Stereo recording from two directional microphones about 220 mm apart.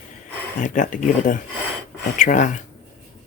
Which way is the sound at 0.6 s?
35° left (ahead or behind).